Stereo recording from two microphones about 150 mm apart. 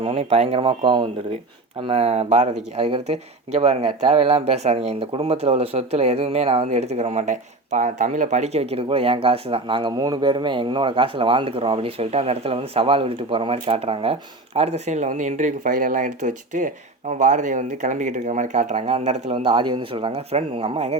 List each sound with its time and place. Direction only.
0.0 s speech: 40° right (ahead or behind)